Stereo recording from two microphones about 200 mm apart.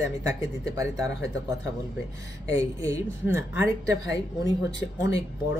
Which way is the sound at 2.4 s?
15° right (ahead or behind).